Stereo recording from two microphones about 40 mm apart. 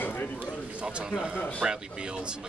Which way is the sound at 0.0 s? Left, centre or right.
Left.